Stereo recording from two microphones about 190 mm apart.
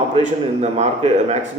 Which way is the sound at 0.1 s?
35° right (ahead or behind).